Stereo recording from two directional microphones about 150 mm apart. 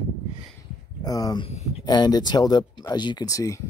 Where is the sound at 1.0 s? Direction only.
25° left (ahead or behind).